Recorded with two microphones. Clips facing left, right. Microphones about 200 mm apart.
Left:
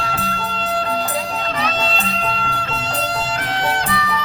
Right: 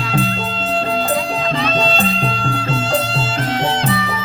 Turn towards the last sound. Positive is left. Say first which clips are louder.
# right 3 dB
turn(degrees=-25)  # may be behind; listen again after turning